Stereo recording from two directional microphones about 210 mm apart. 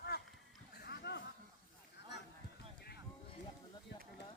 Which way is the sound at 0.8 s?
50° left (ahead or behind).